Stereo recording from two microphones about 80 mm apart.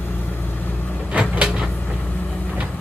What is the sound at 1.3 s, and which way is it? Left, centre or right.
Vehicle, centre.